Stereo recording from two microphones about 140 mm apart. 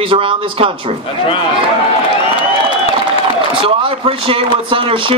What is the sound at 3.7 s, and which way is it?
Speech, 40° right (ahead or behind).